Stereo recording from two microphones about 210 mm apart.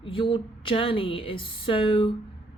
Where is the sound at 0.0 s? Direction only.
25° left (ahead or behind).